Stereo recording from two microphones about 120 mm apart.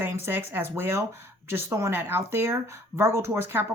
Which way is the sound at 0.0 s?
20° right (ahead or behind).